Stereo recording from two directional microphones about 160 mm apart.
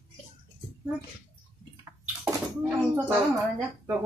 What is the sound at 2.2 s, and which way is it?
Bathtub, 15° right (ahead or behind).